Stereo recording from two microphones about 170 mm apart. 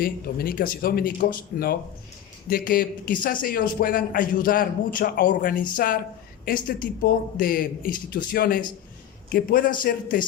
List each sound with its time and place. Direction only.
0.0 s a man's voice: 60° left (ahead or behind)